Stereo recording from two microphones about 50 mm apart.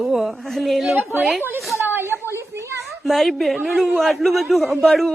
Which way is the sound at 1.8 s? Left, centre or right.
Right.